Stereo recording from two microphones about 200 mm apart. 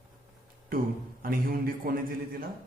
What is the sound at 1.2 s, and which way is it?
Speech, 45° right (ahead or behind).